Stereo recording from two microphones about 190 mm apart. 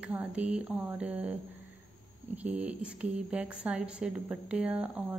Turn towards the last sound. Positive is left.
turn(degrees=-5)  # may be behind; listen again after turning